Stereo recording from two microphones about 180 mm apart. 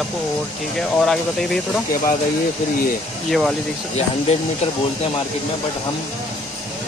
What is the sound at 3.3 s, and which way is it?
Speech, centre (ahead or behind).